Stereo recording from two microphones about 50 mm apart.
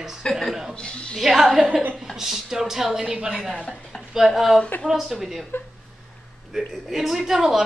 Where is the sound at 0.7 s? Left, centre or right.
Centre.